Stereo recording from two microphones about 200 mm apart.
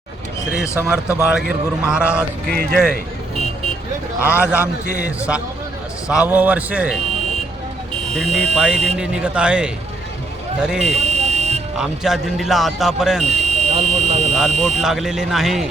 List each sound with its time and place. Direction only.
0.8 s speech: 5° right (ahead or behind)
2.5 s speech: 50° right (ahead or behind)
4.2 s speech: 5° right (ahead or behind)
8.1 s speech: centre (ahead or behind)
10.9 s buzzer: 30° right (ahead or behind)
11.8 s speech: centre (ahead or behind)
13.2 s buzzer: 35° right (ahead or behind)
14.8 s speech: centre (ahead or behind)